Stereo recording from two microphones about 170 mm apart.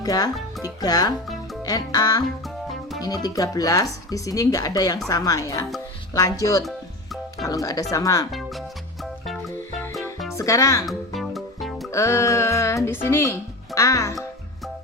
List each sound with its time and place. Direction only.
0.0 s speech: 20° left (ahead or behind)
6.7 s music: centre (ahead or behind)
7.4 s speech: 20° left (ahead or behind)
8.3 s speech: centre (ahead or behind)
9.9 s music: centre (ahead or behind)
10.3 s speech: 20° left (ahead or behind)
10.8 s music: centre (ahead or behind)
11.9 s speech: 15° left (ahead or behind)